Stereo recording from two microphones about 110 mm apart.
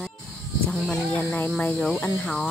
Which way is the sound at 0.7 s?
5° left (ahead or behind).